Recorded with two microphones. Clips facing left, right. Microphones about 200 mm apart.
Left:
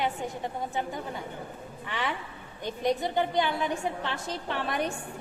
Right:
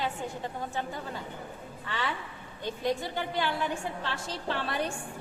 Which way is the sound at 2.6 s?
20° left (ahead or behind).